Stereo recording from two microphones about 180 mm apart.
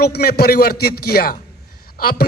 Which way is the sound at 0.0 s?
60° left (ahead or behind).